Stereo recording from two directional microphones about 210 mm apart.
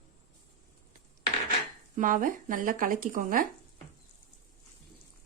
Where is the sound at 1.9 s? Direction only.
40° right (ahead or behind).